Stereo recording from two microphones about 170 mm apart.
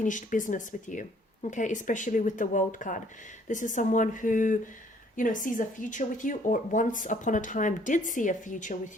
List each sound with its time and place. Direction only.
0.0 s speech: 50° left (ahead or behind)